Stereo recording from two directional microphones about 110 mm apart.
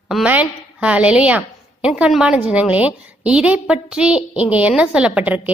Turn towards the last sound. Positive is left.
turn(degrees=-10)  # may be behind; listen again after turning